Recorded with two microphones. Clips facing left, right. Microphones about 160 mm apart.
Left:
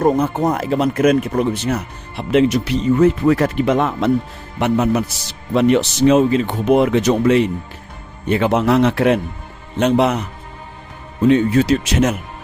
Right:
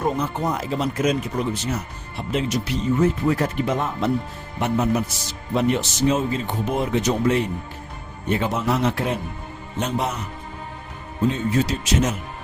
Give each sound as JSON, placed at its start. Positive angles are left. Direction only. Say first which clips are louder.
{"t": 0.0, "sound": "speech", "louder": "left 8 dB", "side_deg": 50}
{"t": 4.6, "sound": "speech", "louder": "left 5 dB", "side_deg": 90}
{"t": 11.3, "sound": "speech", "louder": "left 10 dB", "side_deg": 75}